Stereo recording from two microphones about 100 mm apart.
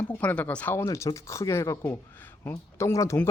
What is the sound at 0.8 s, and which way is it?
Speech, 30° left (ahead or behind).